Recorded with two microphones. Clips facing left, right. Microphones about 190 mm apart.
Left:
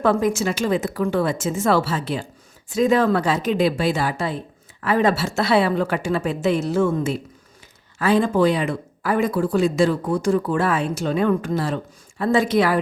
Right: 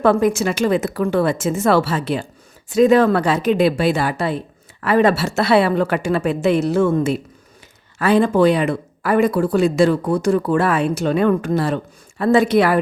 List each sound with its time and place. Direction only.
0.0 s a woman's voice: 65° right (ahead or behind)